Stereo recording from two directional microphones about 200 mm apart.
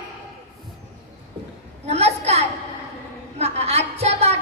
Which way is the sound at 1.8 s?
30° right (ahead or behind).